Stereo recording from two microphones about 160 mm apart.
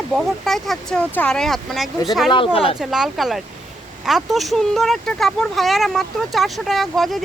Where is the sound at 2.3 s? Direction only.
35° left (ahead or behind).